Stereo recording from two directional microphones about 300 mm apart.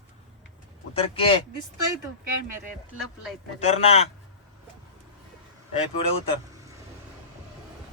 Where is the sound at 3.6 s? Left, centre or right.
Left.